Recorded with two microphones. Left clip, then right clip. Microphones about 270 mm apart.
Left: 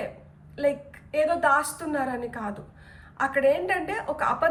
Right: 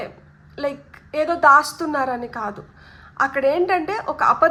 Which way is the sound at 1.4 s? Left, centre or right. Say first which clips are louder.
Right 9 dB; centre.